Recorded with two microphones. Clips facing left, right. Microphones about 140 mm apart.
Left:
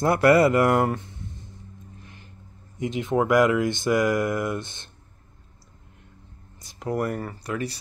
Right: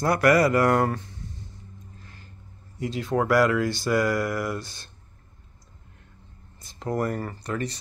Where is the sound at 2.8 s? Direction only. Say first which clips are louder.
Left 2 dB; 20° left (ahead or behind).